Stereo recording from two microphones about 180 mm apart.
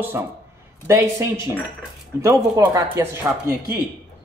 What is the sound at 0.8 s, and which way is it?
Speech, 15° right (ahead or behind).